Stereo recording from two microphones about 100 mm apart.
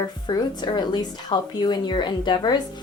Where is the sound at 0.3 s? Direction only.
45° left (ahead or behind).